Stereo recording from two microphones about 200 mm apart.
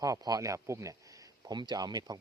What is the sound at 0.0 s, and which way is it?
Speech, 20° right (ahead or behind).